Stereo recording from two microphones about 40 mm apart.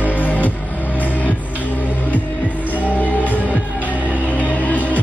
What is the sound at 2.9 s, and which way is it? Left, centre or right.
Music, left.